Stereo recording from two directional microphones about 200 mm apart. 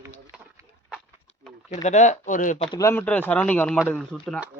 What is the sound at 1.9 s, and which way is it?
Speech, 35° left (ahead or behind).